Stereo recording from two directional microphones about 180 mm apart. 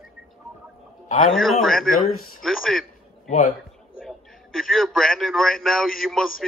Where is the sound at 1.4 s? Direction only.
Centre (ahead or behind).